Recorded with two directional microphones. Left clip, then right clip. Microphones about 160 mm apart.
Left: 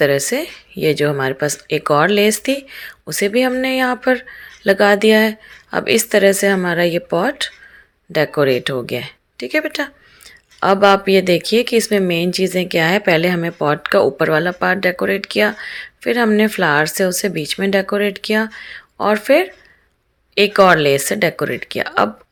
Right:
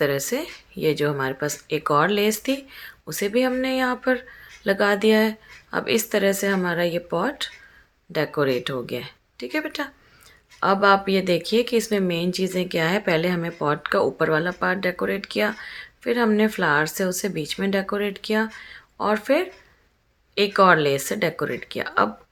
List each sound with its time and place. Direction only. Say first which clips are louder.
0.0 s speech: left 8 dB; 30° left (ahead or behind)